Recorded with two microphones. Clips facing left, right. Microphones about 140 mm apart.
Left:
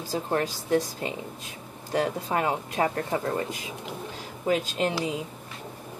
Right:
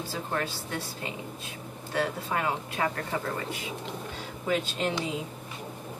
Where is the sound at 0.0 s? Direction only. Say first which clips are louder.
Left 5 dB; 40° left (ahead or behind).